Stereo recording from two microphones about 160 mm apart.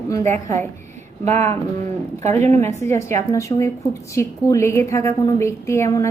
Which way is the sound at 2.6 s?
15° left (ahead or behind).